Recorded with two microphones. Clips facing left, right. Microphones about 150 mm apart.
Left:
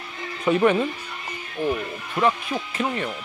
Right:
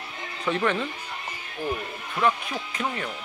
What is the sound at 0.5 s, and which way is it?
Speech, 15° left (ahead or behind).